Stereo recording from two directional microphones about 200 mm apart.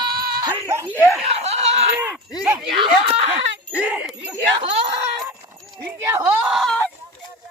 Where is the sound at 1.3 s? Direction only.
30° right (ahead or behind).